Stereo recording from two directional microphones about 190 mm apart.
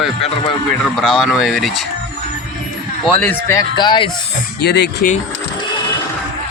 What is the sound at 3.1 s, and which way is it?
Speech, 10° left (ahead or behind).